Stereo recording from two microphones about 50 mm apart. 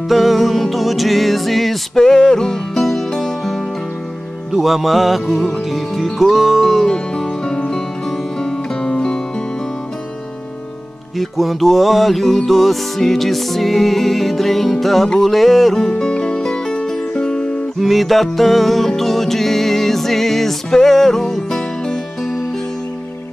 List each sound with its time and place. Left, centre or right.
0.1 s music: centre
4.6 s music: centre
6.9 s music: centre
11.1 s music: centre
15.8 s music: centre
17.7 s music: centre